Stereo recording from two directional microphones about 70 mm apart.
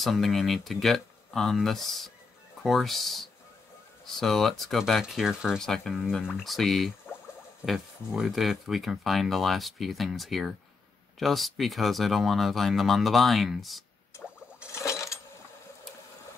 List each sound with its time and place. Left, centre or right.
0.0 s speech: centre
5.6 s speech: centre
14.8 s coin: left